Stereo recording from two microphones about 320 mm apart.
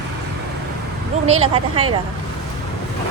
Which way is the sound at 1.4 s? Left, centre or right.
Centre.